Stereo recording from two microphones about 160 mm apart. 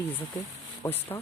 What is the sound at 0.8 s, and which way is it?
Speech, 15° left (ahead or behind).